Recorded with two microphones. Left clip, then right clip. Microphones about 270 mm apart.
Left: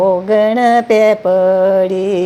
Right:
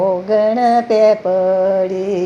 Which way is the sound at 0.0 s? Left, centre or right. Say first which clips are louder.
Left 3 dB; left.